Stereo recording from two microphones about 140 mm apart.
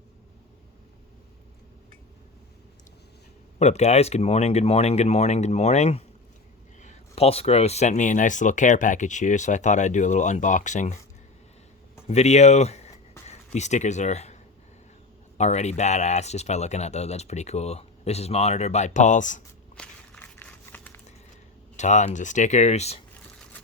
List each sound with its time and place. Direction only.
3.6 s speech: 50° left (ahead or behind)
12.0 s speech: 50° left (ahead or behind)
15.4 s speech: 55° left (ahead or behind)
19.7 s walk: 10° left (ahead or behind)
21.8 s speech: 55° left (ahead or behind)